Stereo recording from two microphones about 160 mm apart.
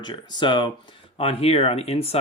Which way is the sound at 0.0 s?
30° left (ahead or behind).